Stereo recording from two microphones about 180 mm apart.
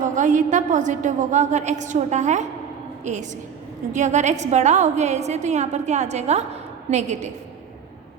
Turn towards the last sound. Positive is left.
turn(degrees=-40)  # may be behind; listen again after turning